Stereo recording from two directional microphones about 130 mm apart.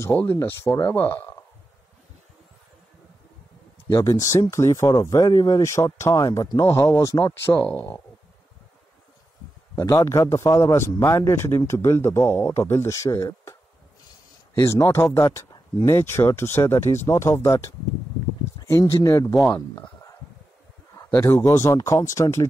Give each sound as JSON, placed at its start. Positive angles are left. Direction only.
{"t": 0.0, "sound": "speech", "side_deg": 15}
{"t": 3.9, "sound": "a man's voice", "side_deg": 25}
{"t": 7.6, "sound": "speech", "side_deg": 10}
{"t": 9.8, "sound": "a man's voice", "side_deg": 20}
{"t": 14.7, "sound": "a man's voice", "side_deg": 20}
{"t": 15.8, "sound": "a man's voice", "side_deg": 20}
{"t": 18.7, "sound": "a man's voice", "side_deg": 25}
{"t": 21.1, "sound": "a man's voice", "side_deg": 20}